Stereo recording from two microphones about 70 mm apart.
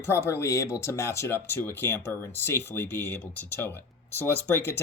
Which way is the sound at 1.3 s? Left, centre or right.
Left.